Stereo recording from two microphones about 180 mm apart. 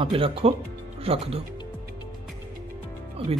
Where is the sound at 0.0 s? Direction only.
30° right (ahead or behind).